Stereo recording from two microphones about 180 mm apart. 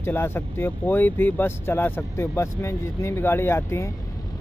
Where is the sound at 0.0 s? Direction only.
10° left (ahead or behind).